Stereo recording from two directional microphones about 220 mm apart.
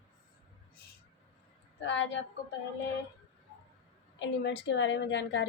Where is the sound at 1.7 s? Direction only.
55° left (ahead or behind).